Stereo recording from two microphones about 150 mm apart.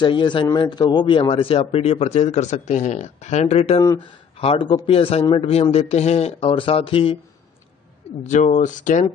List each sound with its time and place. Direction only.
0.0 s a man's voice: 30° left (ahead or behind)
3.8 s speech: 25° left (ahead or behind)
4.4 s speech: 35° left (ahead or behind)
8.2 s speech: 55° left (ahead or behind)